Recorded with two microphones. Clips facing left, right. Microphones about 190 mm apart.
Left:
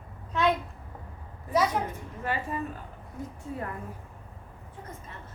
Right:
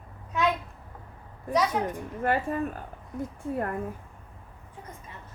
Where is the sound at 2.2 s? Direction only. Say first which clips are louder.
Right 5 dB; 55° right (ahead or behind).